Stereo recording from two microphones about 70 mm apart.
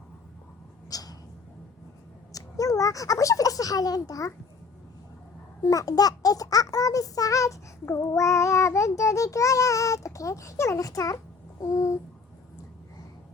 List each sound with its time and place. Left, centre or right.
0.9 s a sound: left
2.3 s speech: left
5.6 s a child's voice: left
11.6 s babbling: left